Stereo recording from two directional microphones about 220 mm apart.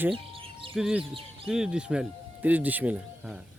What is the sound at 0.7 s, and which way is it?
Speech, 5° right (ahead or behind).